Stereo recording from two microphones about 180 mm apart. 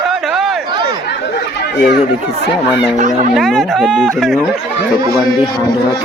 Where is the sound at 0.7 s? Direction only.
25° right (ahead or behind).